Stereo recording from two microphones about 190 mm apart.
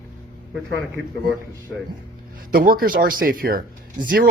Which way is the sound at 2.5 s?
50° right (ahead or behind).